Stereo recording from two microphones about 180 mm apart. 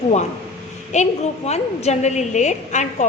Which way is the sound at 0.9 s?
40° left (ahead or behind).